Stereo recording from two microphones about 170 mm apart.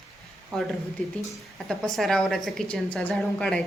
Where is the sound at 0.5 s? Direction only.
5° left (ahead or behind).